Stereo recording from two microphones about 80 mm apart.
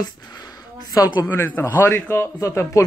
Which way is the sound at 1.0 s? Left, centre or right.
Left.